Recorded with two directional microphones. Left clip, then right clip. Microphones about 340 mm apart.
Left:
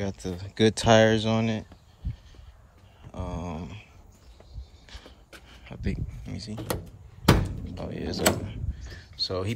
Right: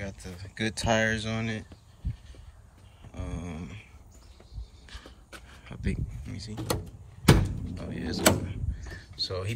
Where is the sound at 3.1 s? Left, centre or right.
Centre.